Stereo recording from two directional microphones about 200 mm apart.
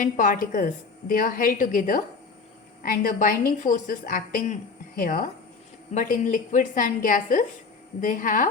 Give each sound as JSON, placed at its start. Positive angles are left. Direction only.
{"t": 0.0, "sound": "a woman's voice", "side_deg": 40}